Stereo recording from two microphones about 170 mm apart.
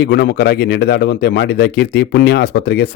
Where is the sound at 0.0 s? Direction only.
70° left (ahead or behind).